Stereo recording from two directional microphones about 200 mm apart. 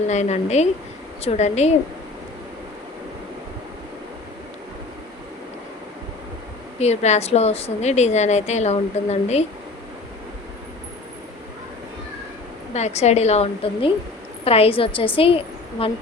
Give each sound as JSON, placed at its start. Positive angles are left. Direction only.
{"t": 0.1, "sound": "a woman's voice", "side_deg": 35}
{"t": 6.7, "sound": "a woman's voice", "side_deg": 35}
{"t": 12.7, "sound": "a woman's voice", "side_deg": 35}